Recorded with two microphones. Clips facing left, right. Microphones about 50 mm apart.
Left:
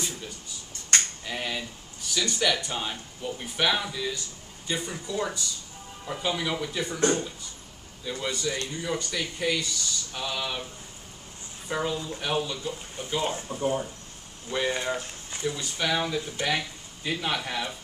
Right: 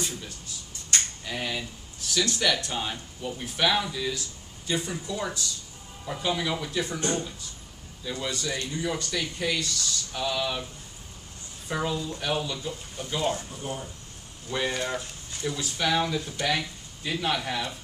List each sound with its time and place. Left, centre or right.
0.0 s a sound: centre
1.2 s speech: centre
8.0 s speech: centre
11.6 s speech: centre
12.9 s speech: left
14.5 s speech: centre